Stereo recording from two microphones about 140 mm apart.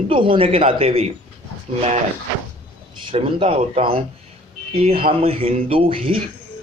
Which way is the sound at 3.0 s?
40° right (ahead or behind).